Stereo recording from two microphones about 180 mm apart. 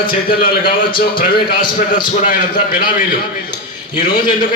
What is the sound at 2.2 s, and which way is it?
Speech, 50° left (ahead or behind).